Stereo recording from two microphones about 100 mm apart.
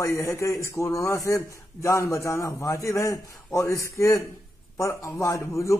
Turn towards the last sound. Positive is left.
turn(degrees=30)  # may be behind; listen again after turning